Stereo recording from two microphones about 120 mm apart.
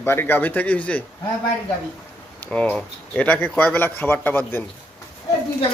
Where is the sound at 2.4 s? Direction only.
10° left (ahead or behind).